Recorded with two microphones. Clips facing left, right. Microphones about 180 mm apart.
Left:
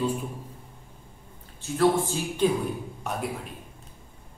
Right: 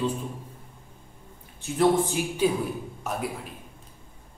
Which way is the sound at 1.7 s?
15° right (ahead or behind).